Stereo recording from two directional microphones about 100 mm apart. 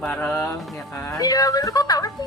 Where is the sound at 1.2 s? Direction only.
40° left (ahead or behind).